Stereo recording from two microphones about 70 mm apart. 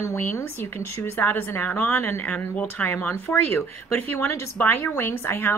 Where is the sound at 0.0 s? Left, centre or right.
Left.